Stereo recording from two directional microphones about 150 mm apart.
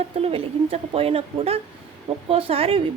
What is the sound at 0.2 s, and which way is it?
A woman's voice, 40° right (ahead or behind).